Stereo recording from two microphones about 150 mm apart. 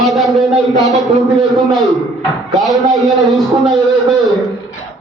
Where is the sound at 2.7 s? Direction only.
25° right (ahead or behind).